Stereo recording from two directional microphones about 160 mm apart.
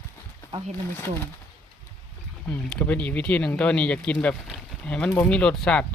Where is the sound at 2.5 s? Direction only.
10° left (ahead or behind).